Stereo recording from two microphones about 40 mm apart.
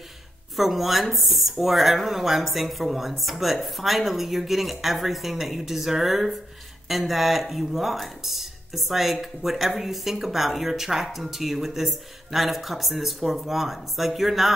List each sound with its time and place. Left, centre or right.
0.6 s speech: centre